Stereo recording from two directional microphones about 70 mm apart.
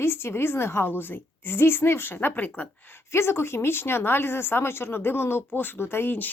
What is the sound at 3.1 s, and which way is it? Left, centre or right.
Speech, left.